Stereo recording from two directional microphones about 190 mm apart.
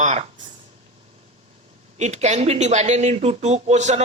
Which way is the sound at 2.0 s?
35° right (ahead or behind).